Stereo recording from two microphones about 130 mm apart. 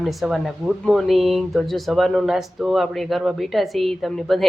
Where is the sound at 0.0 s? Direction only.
Centre (ahead or behind).